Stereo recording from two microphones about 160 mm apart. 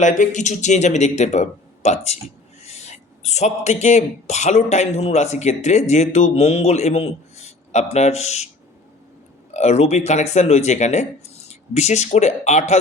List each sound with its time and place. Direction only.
0.0 s speech: 50° left (ahead or behind)
9.5 s speech: 45° left (ahead or behind)